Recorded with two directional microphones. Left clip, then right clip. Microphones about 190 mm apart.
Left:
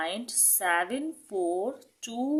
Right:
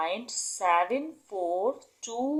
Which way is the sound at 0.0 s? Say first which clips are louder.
Right 1 dB; 30° left (ahead or behind).